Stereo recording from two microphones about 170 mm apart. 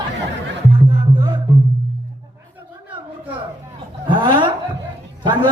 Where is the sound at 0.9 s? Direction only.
25° right (ahead or behind).